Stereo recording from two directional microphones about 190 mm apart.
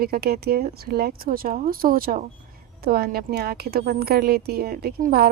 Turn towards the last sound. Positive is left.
turn(degrees=-55)  # may be behind; listen again after turning